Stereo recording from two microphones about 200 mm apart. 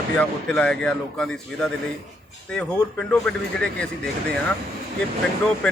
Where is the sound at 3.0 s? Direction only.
5° left (ahead or behind).